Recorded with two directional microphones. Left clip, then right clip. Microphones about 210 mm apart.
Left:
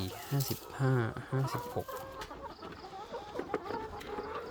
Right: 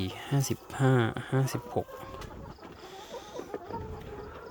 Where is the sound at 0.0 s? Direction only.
35° right (ahead or behind).